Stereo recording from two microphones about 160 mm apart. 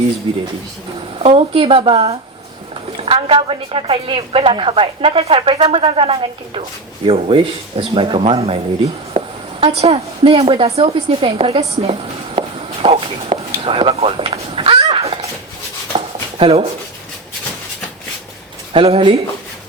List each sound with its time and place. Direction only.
1.2 s a woman's voice: 35° right (ahead or behind)
11.7 s walk: 40° right (ahead or behind)
14.5 s a sound: 40° right (ahead or behind)
16.4 s a woman's voice: 35° right (ahead or behind)
18.7 s a woman's voice: 35° right (ahead or behind)